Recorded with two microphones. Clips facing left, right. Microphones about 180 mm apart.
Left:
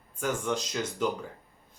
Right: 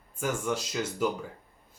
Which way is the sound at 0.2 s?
10° right (ahead or behind).